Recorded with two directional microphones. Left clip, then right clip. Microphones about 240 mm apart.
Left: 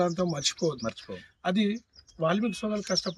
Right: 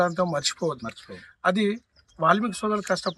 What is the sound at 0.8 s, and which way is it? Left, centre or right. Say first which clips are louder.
Speech: left 2 dB; centre.